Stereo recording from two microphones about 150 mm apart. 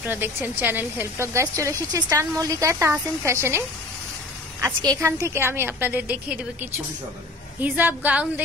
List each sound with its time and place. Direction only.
0.0 s a woman's voice: 15° right (ahead or behind)
4.8 s a woman's voice: 25° right (ahead or behind)